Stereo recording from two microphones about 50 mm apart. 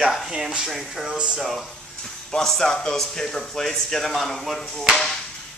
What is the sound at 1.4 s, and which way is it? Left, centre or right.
Speech, centre.